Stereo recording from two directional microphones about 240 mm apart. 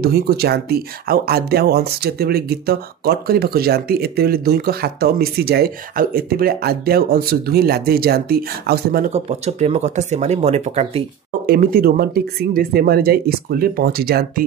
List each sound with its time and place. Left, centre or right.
0.0 s speech: right
9.1 s speech: right